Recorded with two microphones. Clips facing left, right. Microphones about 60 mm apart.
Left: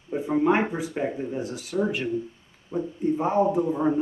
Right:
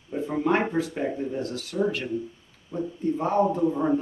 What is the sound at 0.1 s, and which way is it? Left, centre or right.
Speech, centre.